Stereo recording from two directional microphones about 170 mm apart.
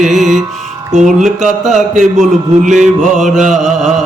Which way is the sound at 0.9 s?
45° right (ahead or behind).